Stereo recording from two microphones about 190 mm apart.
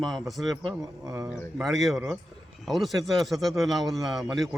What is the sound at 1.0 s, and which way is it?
Speech, 15° right (ahead or behind).